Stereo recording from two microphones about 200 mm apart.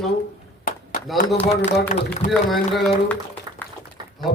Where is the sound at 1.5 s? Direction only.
35° left (ahead or behind).